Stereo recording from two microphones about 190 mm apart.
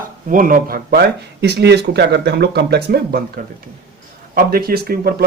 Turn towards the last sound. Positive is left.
turn(degrees=-55)  # may be behind; listen again after turning